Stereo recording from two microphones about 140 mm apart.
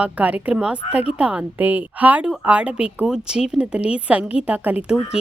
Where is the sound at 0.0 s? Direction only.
10° right (ahead or behind).